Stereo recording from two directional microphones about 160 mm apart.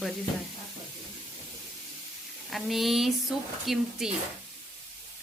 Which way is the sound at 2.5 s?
Centre (ahead or behind).